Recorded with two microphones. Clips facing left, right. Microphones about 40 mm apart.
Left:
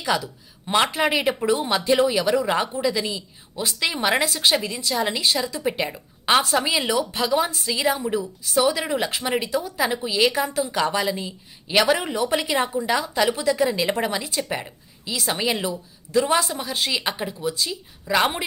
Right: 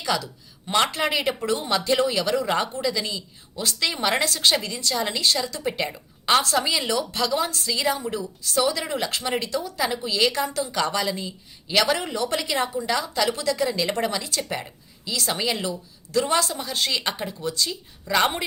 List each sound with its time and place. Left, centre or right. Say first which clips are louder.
0.0 s speech: left 2 dB; centre